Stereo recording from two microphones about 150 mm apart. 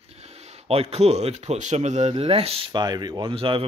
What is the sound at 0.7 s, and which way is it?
Speech, 45° right (ahead or behind).